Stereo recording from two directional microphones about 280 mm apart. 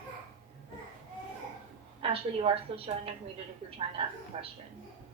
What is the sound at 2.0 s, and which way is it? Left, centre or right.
A woman's voice, centre.